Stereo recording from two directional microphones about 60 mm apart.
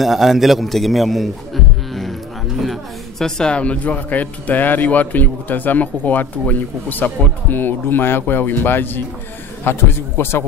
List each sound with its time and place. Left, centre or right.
0.0 s a man's voice: centre; by 10.4 s left